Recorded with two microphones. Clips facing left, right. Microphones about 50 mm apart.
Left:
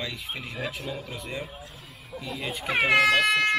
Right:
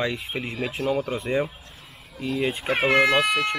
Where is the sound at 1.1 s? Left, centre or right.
Right.